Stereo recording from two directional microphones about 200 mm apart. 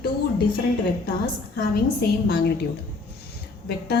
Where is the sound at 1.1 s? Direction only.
50° left (ahead or behind).